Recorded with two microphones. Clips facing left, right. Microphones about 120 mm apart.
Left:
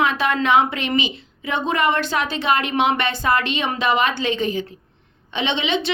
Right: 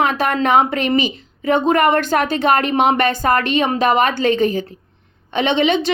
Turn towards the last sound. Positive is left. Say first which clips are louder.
# right 6 dB
turn(degrees=-45)  # may be behind; listen again after turning